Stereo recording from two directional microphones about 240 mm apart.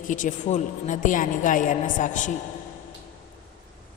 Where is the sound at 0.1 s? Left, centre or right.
Left.